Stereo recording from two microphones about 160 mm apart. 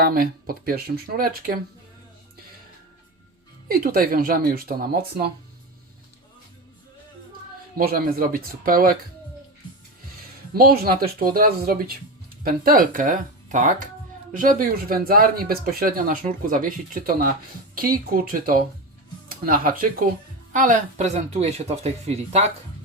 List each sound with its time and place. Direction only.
0.0 s speech: 65° right (ahead or behind)
3.7 s speech: 65° right (ahead or behind)
7.8 s speech: 65° right (ahead or behind)
10.2 s speech: 70° right (ahead or behind); by 21.1 s 55° right (ahead or behind)
21.2 s speech: 40° right (ahead or behind)